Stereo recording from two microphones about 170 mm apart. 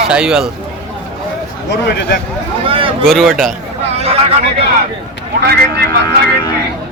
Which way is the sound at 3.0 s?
Centre (ahead or behind).